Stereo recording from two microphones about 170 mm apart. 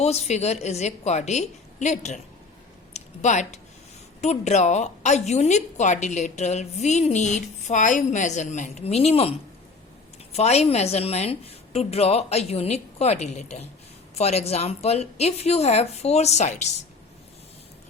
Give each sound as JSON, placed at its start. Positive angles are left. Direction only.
{"t": 0.0, "sound": "a woman's voice", "side_deg": 40}
{"t": 10.3, "sound": "a woman's voice", "side_deg": 40}